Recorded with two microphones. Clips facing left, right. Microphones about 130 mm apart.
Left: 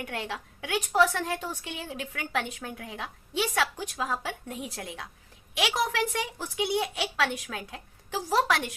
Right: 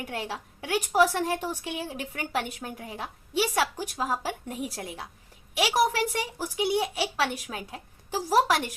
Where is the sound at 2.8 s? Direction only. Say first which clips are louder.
Right 1 dB; 35° right (ahead or behind).